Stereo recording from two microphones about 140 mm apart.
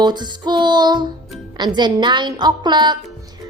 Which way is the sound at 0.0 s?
30° right (ahead or behind).